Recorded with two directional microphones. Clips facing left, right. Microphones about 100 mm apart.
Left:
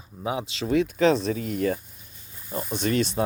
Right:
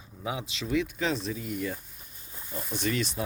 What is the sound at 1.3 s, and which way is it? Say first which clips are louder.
Speech: left 7 dB; 65° left (ahead or behind).